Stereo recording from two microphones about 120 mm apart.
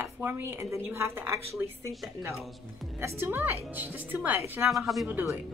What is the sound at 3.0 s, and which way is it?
A woman's voice, 20° right (ahead or behind).